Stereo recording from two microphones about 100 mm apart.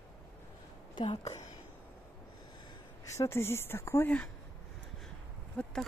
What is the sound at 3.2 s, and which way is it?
Speech, 25° left (ahead or behind).